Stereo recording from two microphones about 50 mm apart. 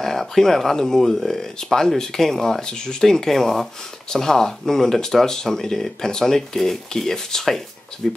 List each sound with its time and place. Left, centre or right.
0.0 s speech: centre
2.6 s speech: centre